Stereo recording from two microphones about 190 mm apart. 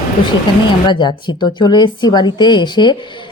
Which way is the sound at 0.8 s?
25° left (ahead or behind).